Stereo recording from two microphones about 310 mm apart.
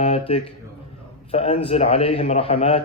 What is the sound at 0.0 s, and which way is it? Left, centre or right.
A man's voice, centre.